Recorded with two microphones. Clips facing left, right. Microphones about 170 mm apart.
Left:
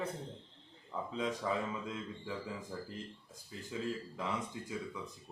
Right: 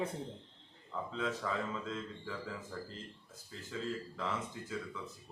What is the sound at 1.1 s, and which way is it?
Speech, 15° left (ahead or behind).